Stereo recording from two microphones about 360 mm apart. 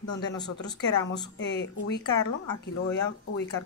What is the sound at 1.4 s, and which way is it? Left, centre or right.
Speech, left.